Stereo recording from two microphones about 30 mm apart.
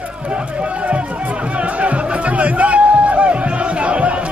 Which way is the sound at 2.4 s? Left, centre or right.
Right.